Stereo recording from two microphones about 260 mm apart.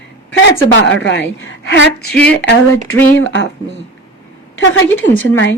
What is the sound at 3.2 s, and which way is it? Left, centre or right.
Speech, left.